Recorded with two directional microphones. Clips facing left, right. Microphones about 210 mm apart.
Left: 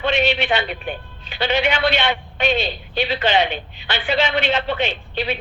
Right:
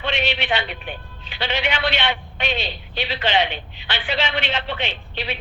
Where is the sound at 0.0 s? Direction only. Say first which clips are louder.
Left 5 dB; 45° left (ahead or behind).